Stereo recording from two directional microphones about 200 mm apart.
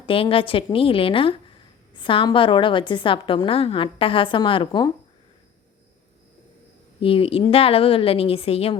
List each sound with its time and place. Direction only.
0.0 s a woman's voice: 25° left (ahead or behind)
7.0 s a woman's voice: 25° left (ahead or behind)